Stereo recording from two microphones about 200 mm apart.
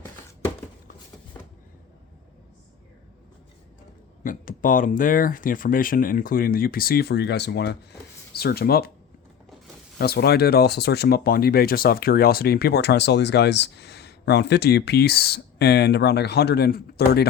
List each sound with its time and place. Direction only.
4.2 s speech: 40° left (ahead or behind)
10.0 s speech: 55° left (ahead or behind)